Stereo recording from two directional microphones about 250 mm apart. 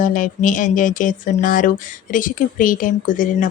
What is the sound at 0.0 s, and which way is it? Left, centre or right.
Speech, left.